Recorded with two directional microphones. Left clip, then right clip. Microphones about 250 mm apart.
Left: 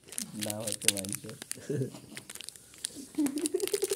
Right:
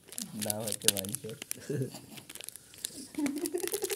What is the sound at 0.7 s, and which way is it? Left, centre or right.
Speech, centre.